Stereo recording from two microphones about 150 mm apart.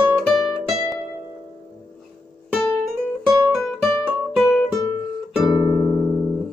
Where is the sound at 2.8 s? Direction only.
Centre (ahead or behind).